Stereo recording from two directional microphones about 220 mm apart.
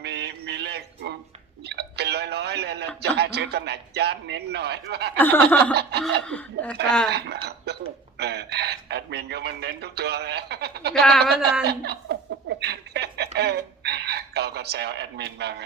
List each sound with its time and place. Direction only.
0.0 s a sound: 50° right (ahead or behind)
1.6 s speech: 50° right (ahead or behind)
5.1 s speech: 10° left (ahead or behind)
5.7 s snicker: 50° right (ahead or behind)
6.2 s speech: 5° left (ahead or behind)
7.1 s snicker: 50° right (ahead or behind)
7.4 s dishes: 50° right (ahead or behind)
8.2 s speech: 50° right (ahead or behind)
11.6 s a sound: 45° right (ahead or behind)